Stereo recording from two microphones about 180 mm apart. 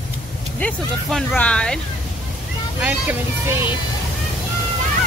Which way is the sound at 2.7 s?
10° right (ahead or behind).